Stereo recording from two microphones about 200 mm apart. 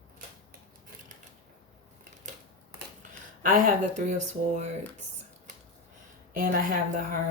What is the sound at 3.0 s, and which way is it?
Speech, 40° right (ahead or behind).